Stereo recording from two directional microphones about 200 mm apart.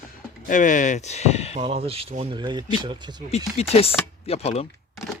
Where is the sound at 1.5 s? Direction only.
30° right (ahead or behind).